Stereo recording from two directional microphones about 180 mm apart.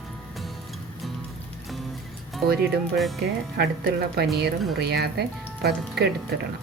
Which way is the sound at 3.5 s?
60° right (ahead or behind).